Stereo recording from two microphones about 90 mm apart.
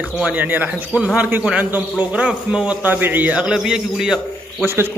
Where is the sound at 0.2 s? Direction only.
20° right (ahead or behind).